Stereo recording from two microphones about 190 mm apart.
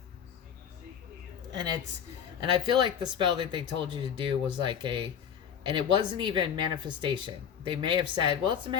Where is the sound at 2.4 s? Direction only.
25° right (ahead or behind).